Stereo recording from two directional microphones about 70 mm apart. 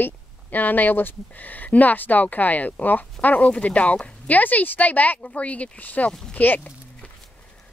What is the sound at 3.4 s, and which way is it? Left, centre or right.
Speech, centre.